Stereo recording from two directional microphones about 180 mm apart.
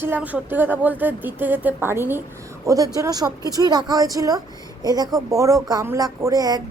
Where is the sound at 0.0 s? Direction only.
10° right (ahead or behind).